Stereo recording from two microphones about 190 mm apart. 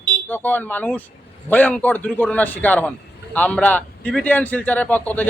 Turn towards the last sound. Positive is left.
turn(degrees=10)  # may be behind; listen again after turning